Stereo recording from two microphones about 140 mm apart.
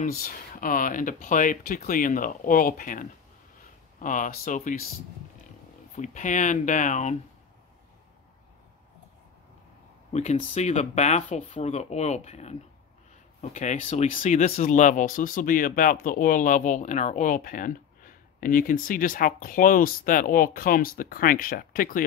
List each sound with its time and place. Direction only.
0.0 s speech: 90° left; by 4.8 s 70° left (ahead or behind)
5.9 s speech: 60° left (ahead or behind)
10.3 s speech: 50° left (ahead or behind); by 22.0 s 90° left